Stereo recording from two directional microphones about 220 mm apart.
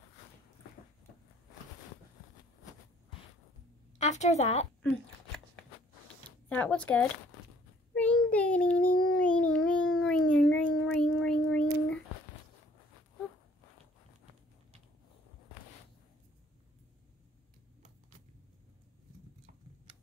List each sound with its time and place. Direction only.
4.0 s a woman's voice: 30° left (ahead or behind)
6.5 s speech: 5° left (ahead or behind)
7.9 s child singing: 5° left (ahead or behind)
9.5 s a sound: 5° left (ahead or behind)